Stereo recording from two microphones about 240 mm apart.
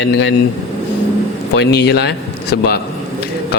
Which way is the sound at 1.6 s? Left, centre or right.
Left.